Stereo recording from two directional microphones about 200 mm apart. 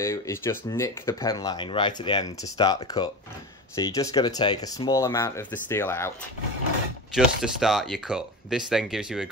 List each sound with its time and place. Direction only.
0.0 s speech: 15° left (ahead or behind)
7.2 s speech: centre (ahead or behind)